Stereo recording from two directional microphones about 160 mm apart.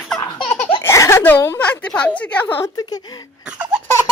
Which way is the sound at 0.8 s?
20° left (ahead or behind).